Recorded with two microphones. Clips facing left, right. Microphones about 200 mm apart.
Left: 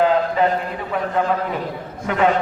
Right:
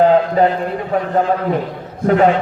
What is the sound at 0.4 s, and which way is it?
Speech, 35° right (ahead or behind).